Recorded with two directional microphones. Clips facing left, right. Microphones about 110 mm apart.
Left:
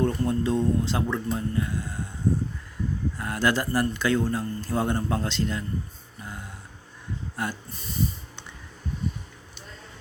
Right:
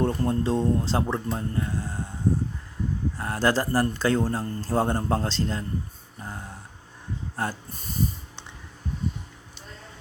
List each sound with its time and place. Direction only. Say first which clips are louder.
0.0 s speech: even; 35° right (ahead or behind)
3.2 s speech: right 1 dB; 35° right (ahead or behind)
6.1 s a sound: right 2 dB; 35° right (ahead or behind)
7.3 s speech: right 2 dB; 40° right (ahead or behind)